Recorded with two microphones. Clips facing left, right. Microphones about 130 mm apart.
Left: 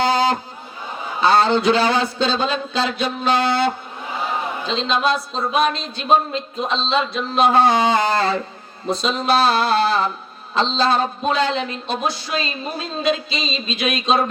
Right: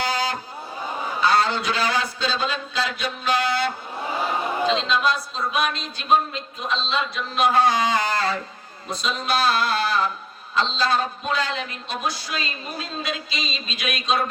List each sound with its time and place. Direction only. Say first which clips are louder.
0.0 s a sound: left 8 dB; 25° left (ahead or behind)
1.2 s a man's voice: left 6 dB; 25° left (ahead or behind)
4.7 s a man's voice: left 5 dB; 25° left (ahead or behind)